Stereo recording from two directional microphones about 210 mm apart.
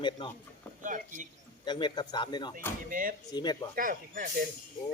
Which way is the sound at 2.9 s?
40° right (ahead or behind).